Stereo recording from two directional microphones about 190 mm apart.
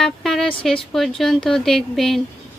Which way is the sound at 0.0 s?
Centre (ahead or behind).